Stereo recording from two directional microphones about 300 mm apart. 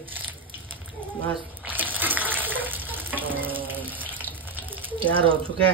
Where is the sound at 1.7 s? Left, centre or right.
Centre.